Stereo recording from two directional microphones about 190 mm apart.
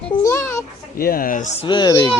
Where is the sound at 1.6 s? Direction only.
25° left (ahead or behind).